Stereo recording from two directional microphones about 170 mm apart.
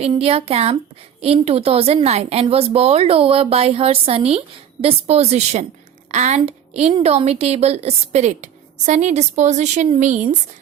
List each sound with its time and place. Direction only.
0.2 s a woman's voice: 35° right (ahead or behind)